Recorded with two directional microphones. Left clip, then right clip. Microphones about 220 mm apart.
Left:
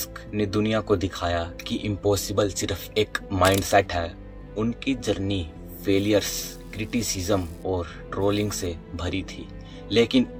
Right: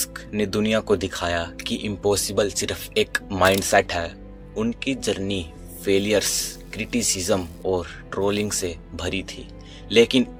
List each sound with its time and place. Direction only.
0.0 s speech: 50° right (ahead or behind)